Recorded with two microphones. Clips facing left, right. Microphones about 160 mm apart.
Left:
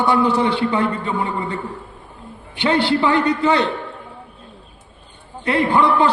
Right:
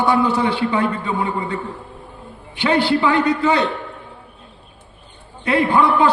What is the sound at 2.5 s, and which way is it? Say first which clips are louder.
A man's voice: even; 30° left (ahead or behind).